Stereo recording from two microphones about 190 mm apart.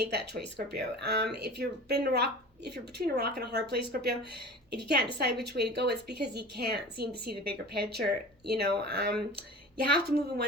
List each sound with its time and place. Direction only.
0.1 s a woman's voice: 55° right (ahead or behind)